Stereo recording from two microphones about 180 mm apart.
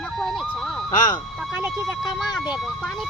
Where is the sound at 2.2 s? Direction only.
20° left (ahead or behind).